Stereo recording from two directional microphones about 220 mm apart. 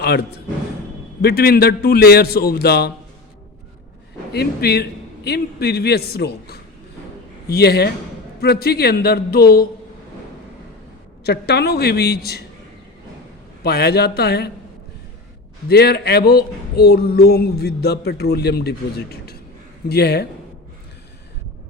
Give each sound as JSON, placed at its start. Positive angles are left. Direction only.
{"t": 0.0, "sound": "speech", "side_deg": 45}
{"t": 4.3, "sound": "speech", "side_deg": 45}
{"t": 11.2, "sound": "speech", "side_deg": 50}
{"t": 13.7, "sound": "speech", "side_deg": 45}
{"t": 15.7, "sound": "speech", "side_deg": 45}
{"t": 19.9, "sound": "speech", "side_deg": 45}